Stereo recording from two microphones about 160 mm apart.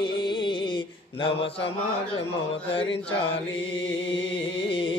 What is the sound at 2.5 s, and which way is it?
Speech, 35° left (ahead or behind).